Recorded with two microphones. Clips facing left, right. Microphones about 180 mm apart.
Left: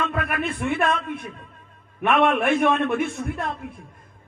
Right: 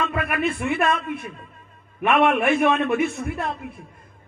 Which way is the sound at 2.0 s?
50° right (ahead or behind).